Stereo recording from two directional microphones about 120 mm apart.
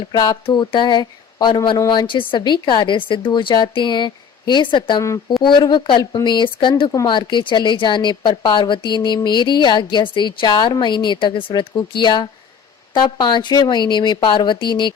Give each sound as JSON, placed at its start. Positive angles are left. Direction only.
{"t": 0.0, "sound": "a woman's voice", "side_deg": 35}